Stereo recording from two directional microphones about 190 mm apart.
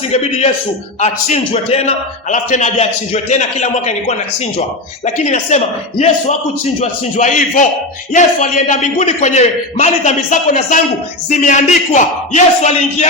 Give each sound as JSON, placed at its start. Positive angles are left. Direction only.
{"t": 0.1, "sound": "a man's voice", "side_deg": 35}
{"t": 5.0, "sound": "a man's voice", "side_deg": 35}